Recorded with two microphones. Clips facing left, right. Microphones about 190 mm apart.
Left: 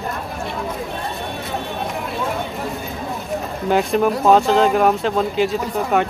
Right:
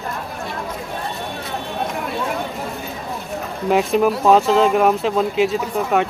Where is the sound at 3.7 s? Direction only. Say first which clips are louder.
Right 1 dB; centre (ahead or behind).